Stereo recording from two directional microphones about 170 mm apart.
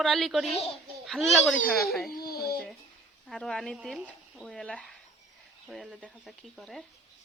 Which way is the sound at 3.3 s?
Centre (ahead or behind).